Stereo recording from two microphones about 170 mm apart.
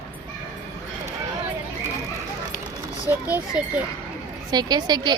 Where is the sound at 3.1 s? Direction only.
10° right (ahead or behind).